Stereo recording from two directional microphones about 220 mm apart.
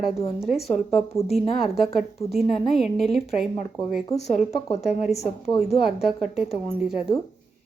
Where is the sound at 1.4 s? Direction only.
Centre (ahead or behind).